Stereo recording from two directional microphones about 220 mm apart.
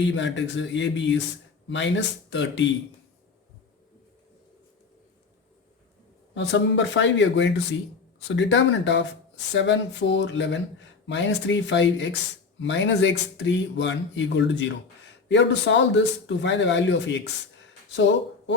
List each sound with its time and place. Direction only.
0.1 s speech: 55° left (ahead or behind)
6.3 s speech: 55° left (ahead or behind)